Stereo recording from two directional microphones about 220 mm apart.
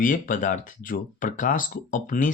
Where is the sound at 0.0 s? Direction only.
40° left (ahead or behind).